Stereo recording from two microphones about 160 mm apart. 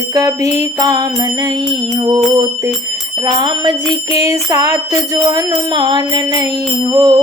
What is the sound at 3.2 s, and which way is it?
Music, 30° right (ahead or behind).